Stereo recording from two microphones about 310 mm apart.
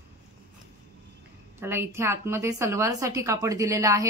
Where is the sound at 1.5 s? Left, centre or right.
Centre.